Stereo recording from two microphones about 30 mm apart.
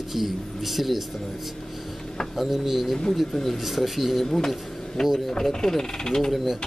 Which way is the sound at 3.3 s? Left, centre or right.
Centre.